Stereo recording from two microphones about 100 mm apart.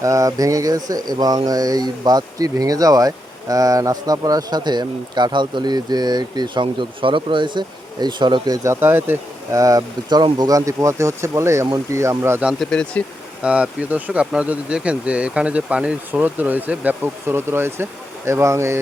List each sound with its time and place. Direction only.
0.0 s speech: 35° right (ahead or behind)
12.5 s speech: 10° left (ahead or behind)
13.4 s speech: 10° right (ahead or behind); by 18.8 s 30° right (ahead or behind)